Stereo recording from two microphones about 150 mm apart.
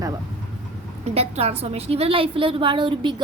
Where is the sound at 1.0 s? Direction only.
45° right (ahead or behind).